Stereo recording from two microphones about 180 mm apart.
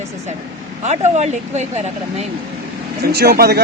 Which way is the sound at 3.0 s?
60° right (ahead or behind).